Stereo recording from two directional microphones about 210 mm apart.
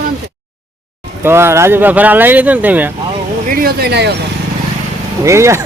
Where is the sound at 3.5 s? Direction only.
45° right (ahead or behind).